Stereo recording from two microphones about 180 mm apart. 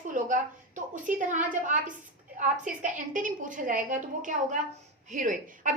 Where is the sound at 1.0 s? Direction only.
45° right (ahead or behind).